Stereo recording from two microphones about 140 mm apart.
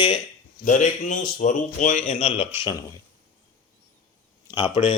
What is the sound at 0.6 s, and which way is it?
A man's voice, 65° left (ahead or behind).